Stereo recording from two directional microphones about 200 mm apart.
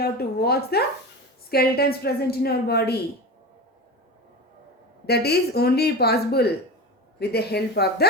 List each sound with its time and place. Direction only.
0.0 s a woman's voice: 50° left (ahead or behind)
5.0 s a woman's voice: 55° left (ahead or behind)